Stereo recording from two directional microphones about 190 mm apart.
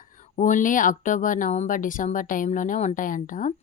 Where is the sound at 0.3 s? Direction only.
40° left (ahead or behind).